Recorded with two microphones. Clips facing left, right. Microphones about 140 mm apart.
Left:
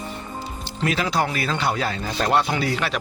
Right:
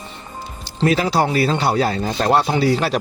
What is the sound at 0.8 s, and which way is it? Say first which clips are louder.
Speech: right 6 dB; 35° right (ahead or behind).